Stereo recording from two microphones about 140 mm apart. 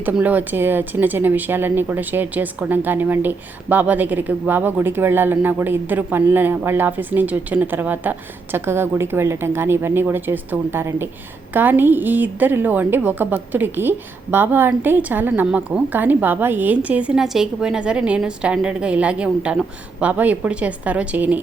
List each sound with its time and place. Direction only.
0.0 s a woman's voice: 10° right (ahead or behind)